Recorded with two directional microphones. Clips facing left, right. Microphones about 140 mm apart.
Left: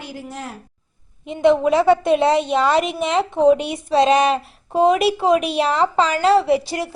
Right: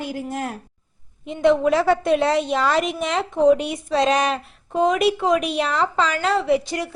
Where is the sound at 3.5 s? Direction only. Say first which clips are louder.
Left 2 dB; 25° left (ahead or behind).